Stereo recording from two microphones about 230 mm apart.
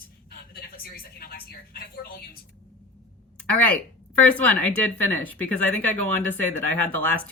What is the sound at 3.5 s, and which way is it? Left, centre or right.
Speech, centre.